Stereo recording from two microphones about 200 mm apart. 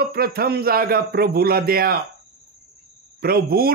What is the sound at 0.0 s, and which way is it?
A man's voice, 50° right (ahead or behind).